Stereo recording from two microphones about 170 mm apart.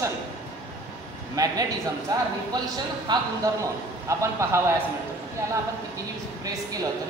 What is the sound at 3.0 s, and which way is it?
A man's voice, 20° right (ahead or behind).